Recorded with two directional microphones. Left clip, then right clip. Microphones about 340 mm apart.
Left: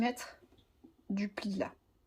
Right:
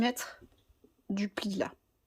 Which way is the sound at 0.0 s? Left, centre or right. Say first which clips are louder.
Right 3 dB; centre.